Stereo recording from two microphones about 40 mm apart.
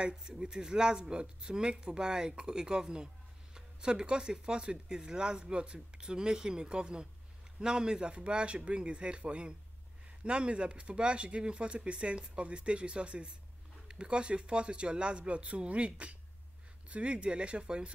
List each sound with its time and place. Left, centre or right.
0.0 s speech: centre